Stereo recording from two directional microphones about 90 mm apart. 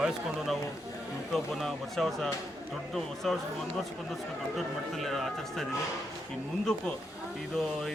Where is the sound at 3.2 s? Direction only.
5° left (ahead or behind).